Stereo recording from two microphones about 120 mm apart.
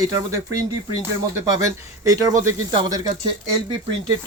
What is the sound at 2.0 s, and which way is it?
Speech, 30° right (ahead or behind).